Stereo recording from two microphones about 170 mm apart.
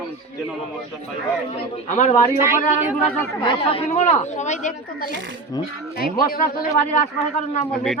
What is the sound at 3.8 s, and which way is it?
Speech, 45° left (ahead or behind).